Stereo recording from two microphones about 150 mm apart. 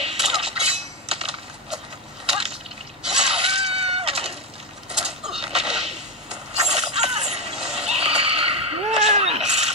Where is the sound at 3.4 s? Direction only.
45° right (ahead or behind).